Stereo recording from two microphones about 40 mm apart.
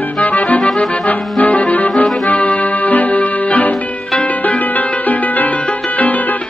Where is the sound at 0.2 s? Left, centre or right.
Left.